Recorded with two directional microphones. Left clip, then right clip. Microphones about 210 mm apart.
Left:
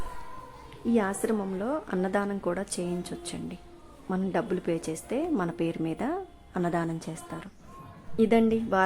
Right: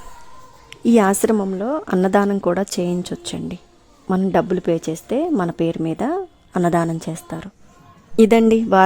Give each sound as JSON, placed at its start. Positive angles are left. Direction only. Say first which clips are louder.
{"t": 0.7, "sound": "a woman's voice", "louder": "right 12 dB", "side_deg": -50}
{"t": 8.1, "sound": "a woman's voice", "louder": "right 11 dB", "side_deg": -50}